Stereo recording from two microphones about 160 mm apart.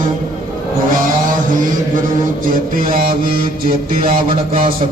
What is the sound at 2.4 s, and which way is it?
Mantra, 60° right (ahead or behind).